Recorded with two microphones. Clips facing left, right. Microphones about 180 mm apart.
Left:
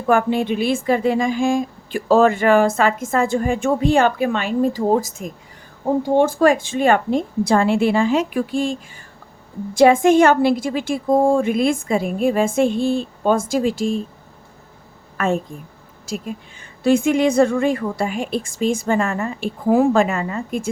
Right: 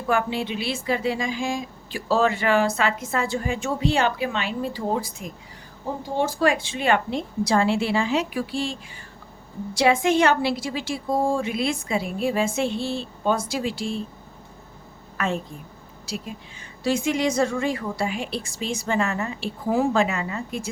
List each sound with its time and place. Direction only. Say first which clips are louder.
0.1 s speech: left 7 dB; 50° left (ahead or behind)
15.2 s a woman's voice: left 6 dB; 50° left (ahead or behind)